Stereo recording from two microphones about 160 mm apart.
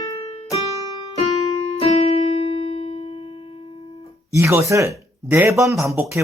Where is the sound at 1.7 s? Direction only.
40° left (ahead or behind).